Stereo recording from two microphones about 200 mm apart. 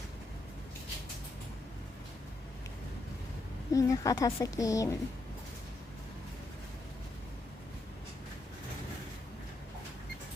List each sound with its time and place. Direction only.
3.7 s a woman's voice: 15° left (ahead or behind)